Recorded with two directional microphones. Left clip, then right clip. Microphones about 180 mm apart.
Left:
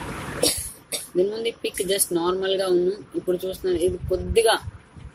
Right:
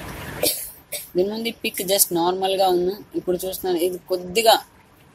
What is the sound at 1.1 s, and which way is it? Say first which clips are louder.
Speech: even; 30° right (ahead or behind).